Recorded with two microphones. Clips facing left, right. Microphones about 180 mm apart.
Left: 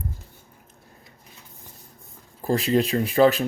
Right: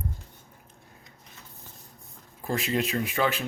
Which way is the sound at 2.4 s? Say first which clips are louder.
Left 7 dB; 35° left (ahead or behind).